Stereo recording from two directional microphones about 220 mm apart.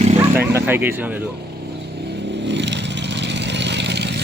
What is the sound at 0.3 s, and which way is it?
Speech, 10° right (ahead or behind).